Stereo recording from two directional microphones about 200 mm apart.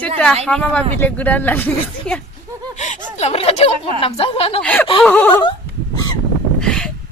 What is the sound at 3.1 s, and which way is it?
A woman's voice, 30° left (ahead or behind).